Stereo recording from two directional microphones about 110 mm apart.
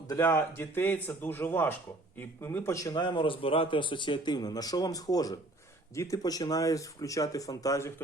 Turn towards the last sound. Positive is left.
turn(degrees=30)  # may be behind; listen again after turning